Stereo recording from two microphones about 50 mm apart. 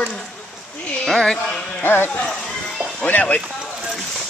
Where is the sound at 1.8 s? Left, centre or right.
Left.